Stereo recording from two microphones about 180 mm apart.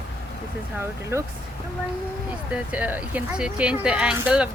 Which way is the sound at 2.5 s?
10° right (ahead or behind).